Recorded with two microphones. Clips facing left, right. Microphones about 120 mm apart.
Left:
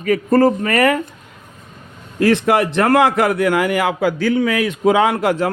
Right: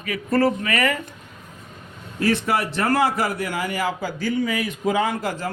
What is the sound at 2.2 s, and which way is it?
A man's voice, 90° left.